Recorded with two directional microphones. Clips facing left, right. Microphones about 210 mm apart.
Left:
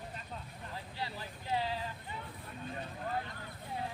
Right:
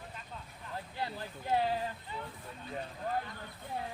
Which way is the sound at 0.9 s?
50° right (ahead or behind).